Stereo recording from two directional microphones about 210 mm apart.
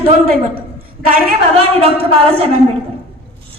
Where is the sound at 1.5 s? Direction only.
25° right (ahead or behind).